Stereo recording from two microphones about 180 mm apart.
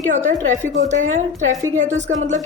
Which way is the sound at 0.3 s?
45° right (ahead or behind).